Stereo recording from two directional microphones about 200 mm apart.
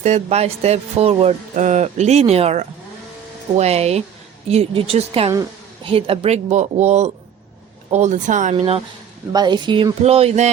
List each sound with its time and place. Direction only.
0.0 s speech: 35° right (ahead or behind)